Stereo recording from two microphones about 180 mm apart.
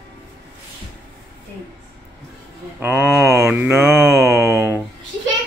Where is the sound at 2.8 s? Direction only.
10° right (ahead or behind).